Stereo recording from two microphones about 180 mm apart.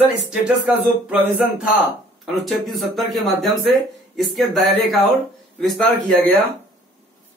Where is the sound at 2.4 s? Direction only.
Centre (ahead or behind).